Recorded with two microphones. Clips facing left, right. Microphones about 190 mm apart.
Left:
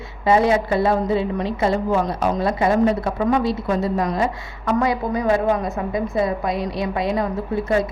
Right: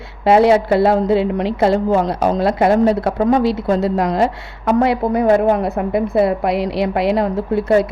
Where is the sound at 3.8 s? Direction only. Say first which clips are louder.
Right 4 dB; 80° right.